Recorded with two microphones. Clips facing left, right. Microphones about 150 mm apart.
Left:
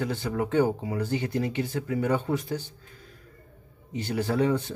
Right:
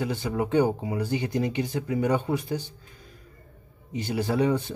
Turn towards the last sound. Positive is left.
turn(degrees=-10)  # may be behind; listen again after turning